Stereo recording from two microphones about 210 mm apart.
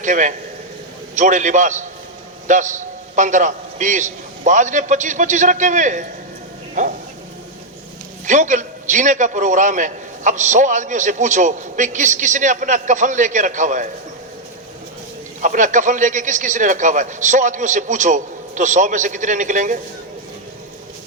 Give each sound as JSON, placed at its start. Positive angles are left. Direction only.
{"t": 0.0, "sound": "a man's voice", "side_deg": -35}
{"t": 6.8, "sound": "bow-wow", "side_deg": -35}
{"t": 8.3, "sound": "a man's voice", "side_deg": -35}
{"t": 15.4, "sound": "a man's voice", "side_deg": -35}